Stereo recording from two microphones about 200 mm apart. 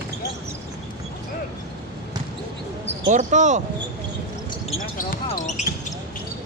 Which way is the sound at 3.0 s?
35° right (ahead or behind).